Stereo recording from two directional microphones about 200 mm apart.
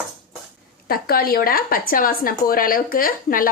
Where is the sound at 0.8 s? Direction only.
50° left (ahead or behind).